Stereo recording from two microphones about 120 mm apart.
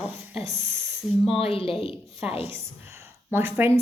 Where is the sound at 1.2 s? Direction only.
50° left (ahead or behind).